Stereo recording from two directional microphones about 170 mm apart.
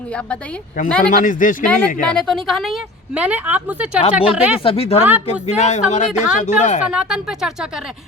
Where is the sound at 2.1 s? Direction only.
5° left (ahead or behind).